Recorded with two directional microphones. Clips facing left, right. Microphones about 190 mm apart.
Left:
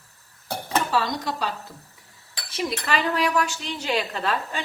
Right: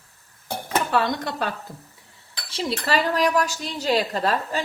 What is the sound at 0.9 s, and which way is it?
Speech, 55° right (ahead or behind).